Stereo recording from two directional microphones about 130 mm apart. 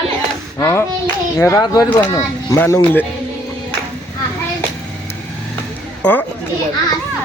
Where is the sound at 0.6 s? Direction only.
15° left (ahead or behind).